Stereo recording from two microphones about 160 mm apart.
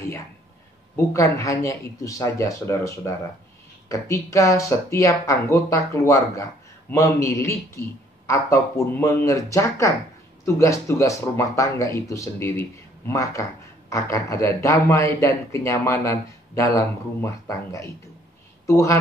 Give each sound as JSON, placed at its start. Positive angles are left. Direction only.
{"t": 0.9, "sound": "a man's voice", "side_deg": 20}